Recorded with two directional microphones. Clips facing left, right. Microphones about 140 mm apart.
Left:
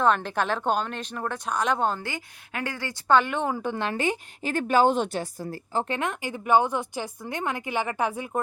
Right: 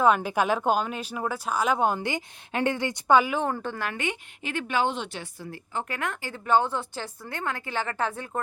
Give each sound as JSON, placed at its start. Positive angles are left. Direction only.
{"t": 0.0, "sound": "speech", "side_deg": -10}
{"t": 3.2, "sound": "a woman's voice", "side_deg": -5}
{"t": 3.6, "sound": "speech", "side_deg": 15}
{"t": 3.8, "sound": "a woman's voice", "side_deg": 35}
{"t": 5.9, "sound": "speech", "side_deg": 20}